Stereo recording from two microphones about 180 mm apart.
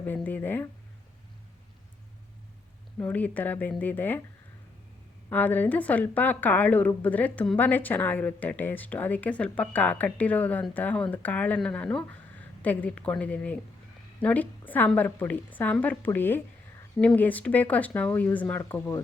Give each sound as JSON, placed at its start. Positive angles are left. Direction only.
{"t": 0.0, "sound": "a sound", "side_deg": 10}
{"t": 3.0, "sound": "a woman's voice", "side_deg": 10}
{"t": 5.3, "sound": "a woman's voice", "side_deg": 10}